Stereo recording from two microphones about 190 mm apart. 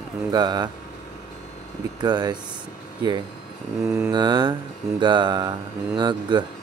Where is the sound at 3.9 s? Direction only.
10° right (ahead or behind).